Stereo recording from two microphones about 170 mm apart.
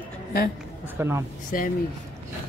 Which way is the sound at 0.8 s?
15° right (ahead or behind).